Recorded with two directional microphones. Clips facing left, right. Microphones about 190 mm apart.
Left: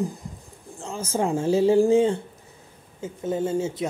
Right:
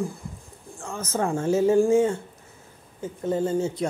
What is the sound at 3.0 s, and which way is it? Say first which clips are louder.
Speech: right 1 dB; 5° left (ahead or behind).